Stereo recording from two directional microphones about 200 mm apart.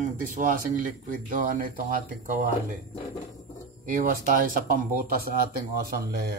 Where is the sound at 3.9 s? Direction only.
45° right (ahead or behind).